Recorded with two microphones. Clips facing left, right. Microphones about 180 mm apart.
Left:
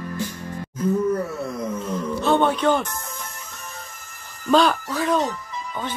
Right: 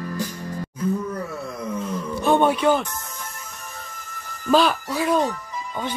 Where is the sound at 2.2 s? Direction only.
15° right (ahead or behind).